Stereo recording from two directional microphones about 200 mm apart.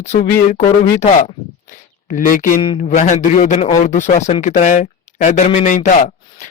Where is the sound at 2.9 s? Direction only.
40° left (ahead or behind).